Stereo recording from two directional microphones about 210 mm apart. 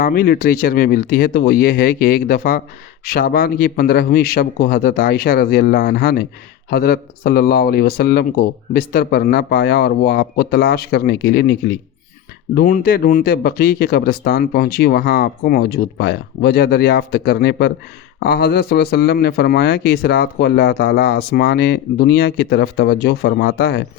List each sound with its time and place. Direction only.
0.0 s a man's voice: 45° left (ahead or behind)
12.5 s a man's voice: 40° left (ahead or behind)